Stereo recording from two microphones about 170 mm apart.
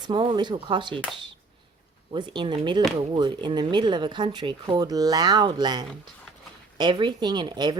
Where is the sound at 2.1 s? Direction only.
25° right (ahead or behind).